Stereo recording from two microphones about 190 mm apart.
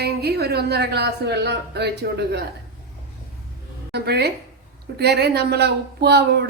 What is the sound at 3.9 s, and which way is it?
A woman's voice, 60° right (ahead or behind).